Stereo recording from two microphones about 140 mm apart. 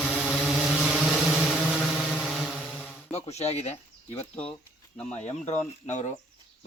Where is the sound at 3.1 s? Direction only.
50° left (ahead or behind).